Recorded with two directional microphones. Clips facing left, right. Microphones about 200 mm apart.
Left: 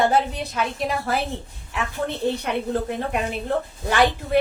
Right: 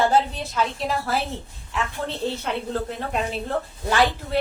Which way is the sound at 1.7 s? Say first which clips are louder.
Left 1 dB; 15° left (ahead or behind).